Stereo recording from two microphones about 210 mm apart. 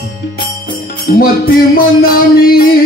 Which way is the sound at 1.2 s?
45° left (ahead or behind).